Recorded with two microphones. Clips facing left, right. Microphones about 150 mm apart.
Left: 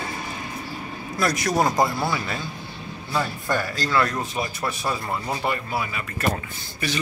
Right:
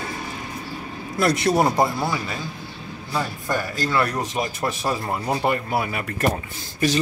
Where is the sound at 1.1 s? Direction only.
25° right (ahead or behind).